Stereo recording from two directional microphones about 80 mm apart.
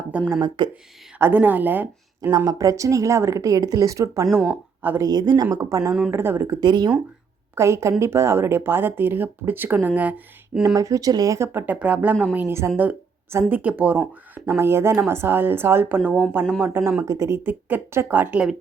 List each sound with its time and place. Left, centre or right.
0.3 s speech: right
1.2 s speech: right
2.3 s speech: right
5.5 s speech: right
6.1 s speech: right
6.6 s speech: right
7.5 s speech: right; by 10.6 s centre
10.8 s speech: right
11.3 s speech: right
12.5 s speech: right
13.5 s speech: centre
14.3 s speech: right